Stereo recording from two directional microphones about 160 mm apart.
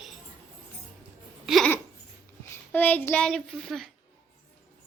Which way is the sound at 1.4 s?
Centre (ahead or behind).